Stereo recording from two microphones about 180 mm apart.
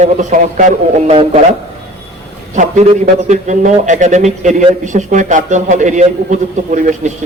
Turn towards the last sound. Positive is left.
turn(degrees=-45)  # may be behind; listen again after turning